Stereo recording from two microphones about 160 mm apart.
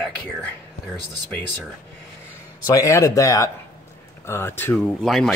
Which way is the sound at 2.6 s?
20° left (ahead or behind).